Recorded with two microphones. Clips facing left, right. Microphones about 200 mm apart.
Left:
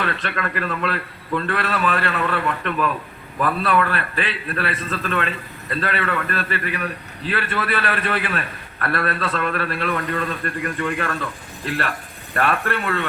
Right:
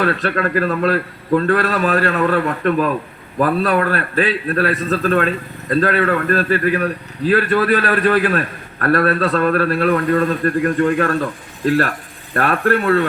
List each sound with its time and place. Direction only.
0.0 s a man's voice: 40° right (ahead or behind)